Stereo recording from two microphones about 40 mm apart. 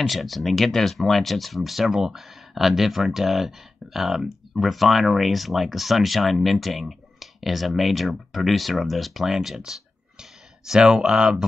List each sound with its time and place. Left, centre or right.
0.0 s speech: centre
9.6 s clicking: centre
10.9 s speech: centre